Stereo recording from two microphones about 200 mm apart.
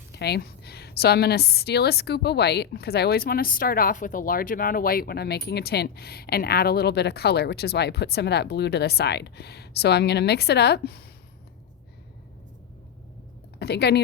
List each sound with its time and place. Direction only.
0.1 s a woman's voice: 55° left (ahead or behind)
13.6 s speech: 55° left (ahead or behind)